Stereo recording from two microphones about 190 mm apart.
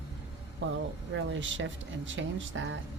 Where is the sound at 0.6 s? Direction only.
70° right (ahead or behind).